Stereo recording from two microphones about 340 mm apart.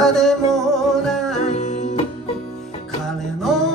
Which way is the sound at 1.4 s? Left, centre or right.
Centre.